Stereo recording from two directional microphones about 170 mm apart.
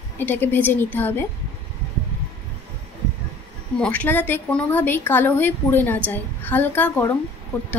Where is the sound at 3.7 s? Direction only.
10° left (ahead or behind).